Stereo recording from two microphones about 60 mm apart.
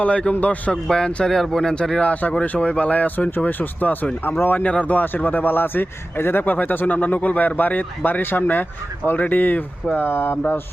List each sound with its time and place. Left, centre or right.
0.0 s speech: centre
0.9 s a man's voice: centre; by 10.3 s left